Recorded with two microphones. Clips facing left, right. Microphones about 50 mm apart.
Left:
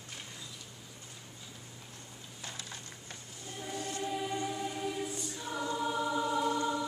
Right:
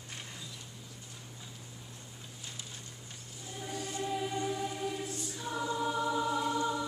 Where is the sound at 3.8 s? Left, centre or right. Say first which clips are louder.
Right 1 dB; centre.